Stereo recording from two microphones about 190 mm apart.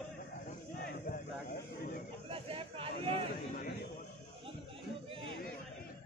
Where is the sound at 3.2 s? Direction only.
55° left (ahead or behind).